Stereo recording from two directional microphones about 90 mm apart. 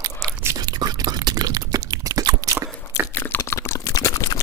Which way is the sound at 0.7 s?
50° right (ahead or behind).